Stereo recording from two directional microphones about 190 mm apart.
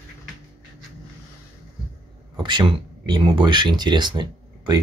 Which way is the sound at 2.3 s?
25° right (ahead or behind).